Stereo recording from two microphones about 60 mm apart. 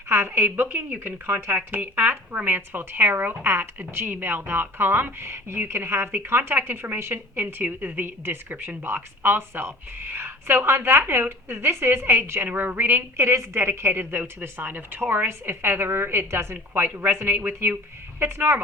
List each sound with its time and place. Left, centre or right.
0.1 s a woman's voice: right
12.5 s a woman's voice: right
13.1 s a woman's voice: right